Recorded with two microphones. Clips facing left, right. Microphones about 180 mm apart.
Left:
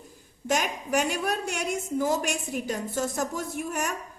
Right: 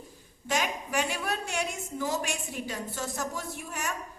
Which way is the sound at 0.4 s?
45° left (ahead or behind).